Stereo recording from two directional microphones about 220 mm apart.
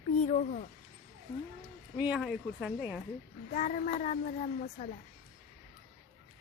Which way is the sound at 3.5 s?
35° left (ahead or behind).